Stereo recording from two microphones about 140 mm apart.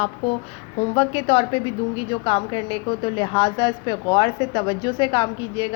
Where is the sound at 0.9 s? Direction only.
45° left (ahead or behind).